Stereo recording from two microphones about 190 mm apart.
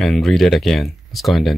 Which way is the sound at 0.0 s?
Centre (ahead or behind).